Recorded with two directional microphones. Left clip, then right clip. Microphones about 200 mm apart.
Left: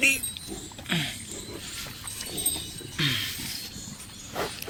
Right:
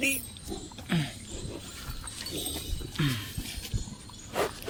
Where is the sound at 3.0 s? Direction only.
30° right (ahead or behind).